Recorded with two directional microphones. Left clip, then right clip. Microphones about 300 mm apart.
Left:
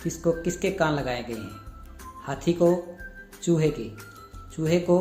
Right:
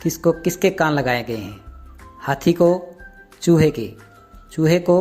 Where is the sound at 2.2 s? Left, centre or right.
Right.